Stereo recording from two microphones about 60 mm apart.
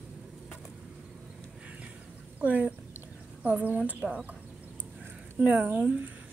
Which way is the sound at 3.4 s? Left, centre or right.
Right.